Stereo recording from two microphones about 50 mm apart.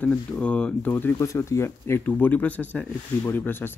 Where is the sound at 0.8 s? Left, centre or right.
Left.